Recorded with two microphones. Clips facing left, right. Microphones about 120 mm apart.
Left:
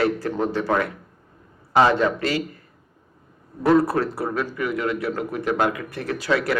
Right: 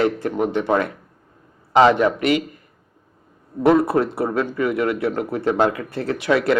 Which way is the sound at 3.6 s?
20° right (ahead or behind).